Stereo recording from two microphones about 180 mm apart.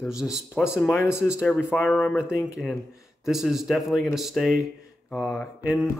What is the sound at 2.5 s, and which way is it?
Speech, centre (ahead or behind).